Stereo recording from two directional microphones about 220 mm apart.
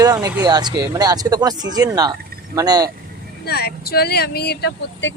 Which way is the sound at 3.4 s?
45° left (ahead or behind).